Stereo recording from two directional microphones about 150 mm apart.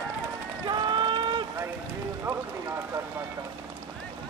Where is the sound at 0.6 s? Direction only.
30° right (ahead or behind).